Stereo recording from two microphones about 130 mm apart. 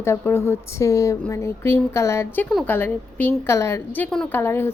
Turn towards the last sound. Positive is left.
turn(degrees=15)  # may be behind; listen again after turning